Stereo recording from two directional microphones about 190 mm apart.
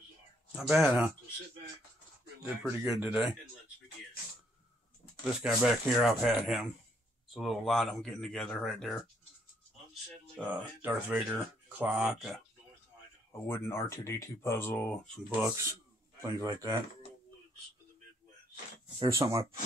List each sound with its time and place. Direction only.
0.6 s speech: 5° right (ahead or behind)
2.6 s speech: 10° right (ahead or behind)
5.4 s speech: 5° right (ahead or behind)
10.3 s speech: 5° right (ahead or behind)
13.5 s speech: 15° left (ahead or behind)
15.2 s speech: 10° right (ahead or behind)
19.0 s speech: 15° right (ahead or behind)